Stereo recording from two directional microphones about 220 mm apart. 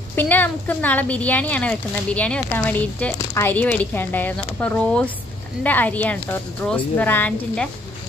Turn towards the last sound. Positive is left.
turn(degrees=5)  # may be behind; listen again after turning